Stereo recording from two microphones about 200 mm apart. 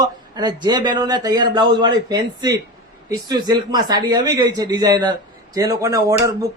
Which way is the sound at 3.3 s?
20° right (ahead or behind).